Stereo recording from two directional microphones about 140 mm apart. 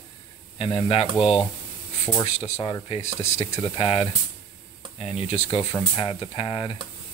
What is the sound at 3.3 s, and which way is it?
Speech, 50° left (ahead or behind).